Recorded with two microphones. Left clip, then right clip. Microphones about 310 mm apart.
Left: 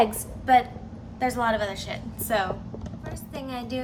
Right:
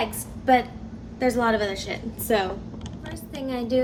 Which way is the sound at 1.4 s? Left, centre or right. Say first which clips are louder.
Right 2 dB; left.